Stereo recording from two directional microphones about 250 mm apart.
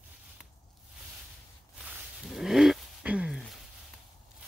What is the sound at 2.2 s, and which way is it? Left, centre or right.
Roaring cats, centre.